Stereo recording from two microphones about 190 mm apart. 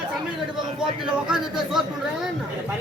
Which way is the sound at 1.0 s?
5° right (ahead or behind).